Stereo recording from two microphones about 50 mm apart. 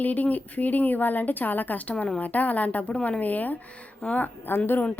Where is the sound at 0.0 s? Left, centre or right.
Left.